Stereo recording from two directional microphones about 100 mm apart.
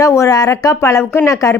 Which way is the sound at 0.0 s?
30° left (ahead or behind).